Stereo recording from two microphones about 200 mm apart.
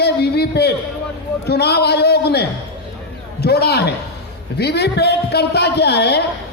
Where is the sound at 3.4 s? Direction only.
55° left (ahead or behind).